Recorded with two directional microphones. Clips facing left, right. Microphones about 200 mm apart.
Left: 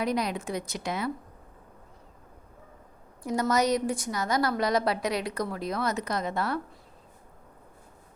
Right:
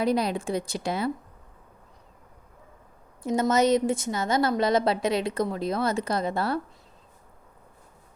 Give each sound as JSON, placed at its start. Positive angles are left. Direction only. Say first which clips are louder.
{"t": 0.0, "sound": "a woman's voice", "louder": "right 4 dB", "side_deg": -30}
{"t": 3.2, "sound": "a woman's voice", "louder": "right 4 dB", "side_deg": -25}